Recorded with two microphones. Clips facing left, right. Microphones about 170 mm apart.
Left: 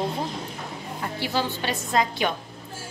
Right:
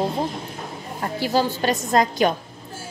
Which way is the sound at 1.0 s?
40° right (ahead or behind).